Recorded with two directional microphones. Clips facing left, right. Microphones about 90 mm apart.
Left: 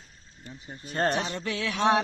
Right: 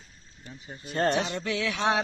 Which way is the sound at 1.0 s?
45° left (ahead or behind).